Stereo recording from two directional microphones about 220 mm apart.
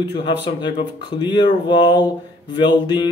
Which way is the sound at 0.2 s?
20° left (ahead or behind).